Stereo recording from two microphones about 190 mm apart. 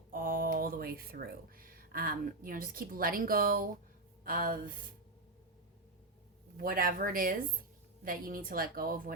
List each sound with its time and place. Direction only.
0.1 s a woman's voice: 45° right (ahead or behind)
6.6 s a woman's voice: 45° right (ahead or behind)